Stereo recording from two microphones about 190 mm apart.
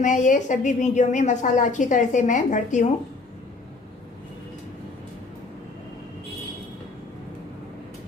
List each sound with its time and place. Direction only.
0.0 s a woman's voice: 40° left (ahead or behind)